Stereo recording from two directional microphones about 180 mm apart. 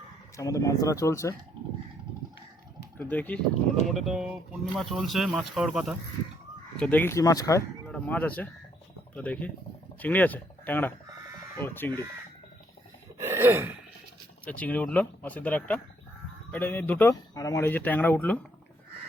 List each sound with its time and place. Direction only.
0.3 s speech: 20° left (ahead or behind)
3.0 s speech: 10° left (ahead or behind)
6.7 s speech: 10° left (ahead or behind)
7.9 s speech: 5° left (ahead or behind)
13.1 s a sound: 15° right (ahead or behind)
14.4 s speech: 10° left (ahead or behind)